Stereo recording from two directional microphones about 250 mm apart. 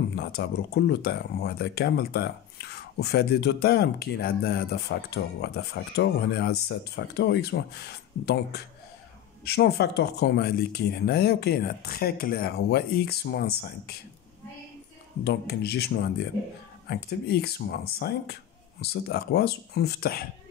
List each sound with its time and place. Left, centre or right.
0.1 s speech: left
15.2 s speech: left